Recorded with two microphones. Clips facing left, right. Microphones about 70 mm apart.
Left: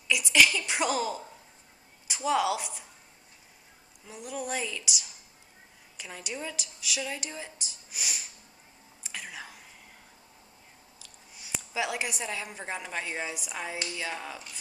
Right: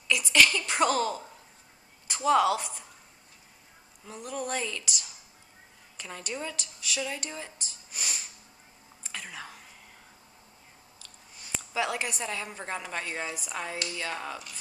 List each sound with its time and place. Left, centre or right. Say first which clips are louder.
0.1 s a woman's voice: even; centre
4.0 s a woman's voice: right 1 dB; centre
9.0 s whispering: even; centre
11.0 s a woman's voice: right 1 dB; centre